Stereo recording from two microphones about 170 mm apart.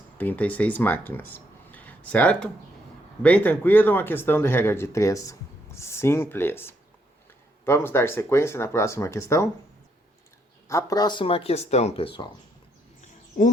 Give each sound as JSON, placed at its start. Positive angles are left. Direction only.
{"t": 0.2, "sound": "speech", "side_deg": 10}
{"t": 10.7, "sound": "speech", "side_deg": 20}